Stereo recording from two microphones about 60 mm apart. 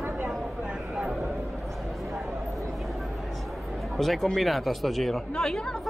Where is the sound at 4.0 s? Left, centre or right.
Centre.